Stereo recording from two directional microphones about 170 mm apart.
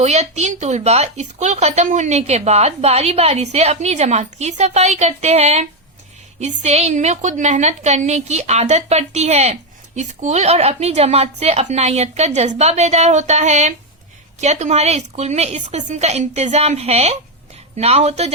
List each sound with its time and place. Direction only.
0.0 s a woman's voice: 40° right (ahead or behind)